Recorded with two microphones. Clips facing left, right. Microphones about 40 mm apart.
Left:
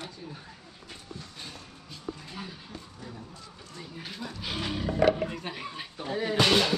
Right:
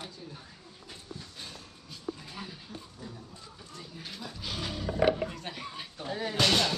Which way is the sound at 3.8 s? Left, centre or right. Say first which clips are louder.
Left 4 dB; centre.